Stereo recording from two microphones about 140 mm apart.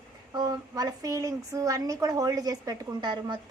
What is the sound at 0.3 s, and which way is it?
A woman's voice, 30° right (ahead or behind).